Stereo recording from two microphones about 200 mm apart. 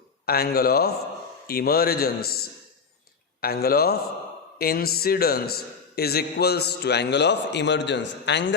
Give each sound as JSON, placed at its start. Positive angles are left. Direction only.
{"t": 0.3, "sound": "speech", "side_deg": 50}
{"t": 3.4, "sound": "a man's voice", "side_deg": 50}